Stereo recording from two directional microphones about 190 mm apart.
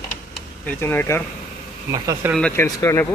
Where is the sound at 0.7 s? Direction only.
10° left (ahead or behind).